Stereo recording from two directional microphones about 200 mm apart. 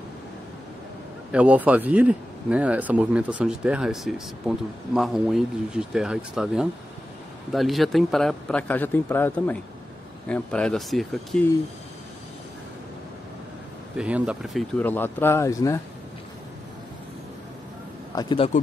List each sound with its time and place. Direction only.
1.3 s speech: 5° right (ahead or behind)
13.9 s speech: 5° right (ahead or behind)
14.8 s speech: 10° left (ahead or behind)
18.1 s a man's voice: 25° left (ahead or behind)